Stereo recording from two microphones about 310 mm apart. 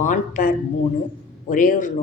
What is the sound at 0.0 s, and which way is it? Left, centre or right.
Speech, left.